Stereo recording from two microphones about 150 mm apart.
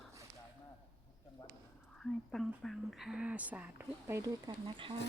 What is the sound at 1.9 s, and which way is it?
Speech, 5° left (ahead or behind).